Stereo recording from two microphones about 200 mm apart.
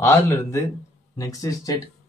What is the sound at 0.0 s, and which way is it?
Speech, 15° left (ahead or behind).